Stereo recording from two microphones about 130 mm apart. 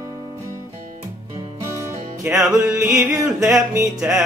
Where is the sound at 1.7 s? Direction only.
20° right (ahead or behind).